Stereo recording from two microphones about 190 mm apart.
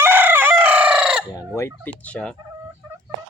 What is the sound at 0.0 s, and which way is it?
Chicken, 10° right (ahead or behind).